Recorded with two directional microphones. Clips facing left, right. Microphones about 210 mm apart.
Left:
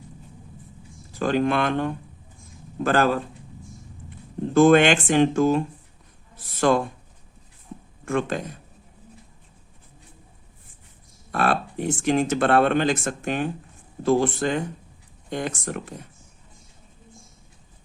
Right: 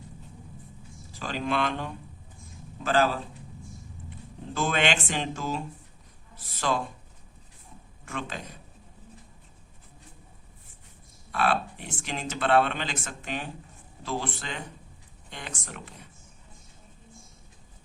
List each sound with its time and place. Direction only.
1.2 s speech: 55° left (ahead or behind)
4.5 s speech: 50° left (ahead or behind)
8.0 s speech: 50° left (ahead or behind)
11.3 s speech: 45° left (ahead or behind)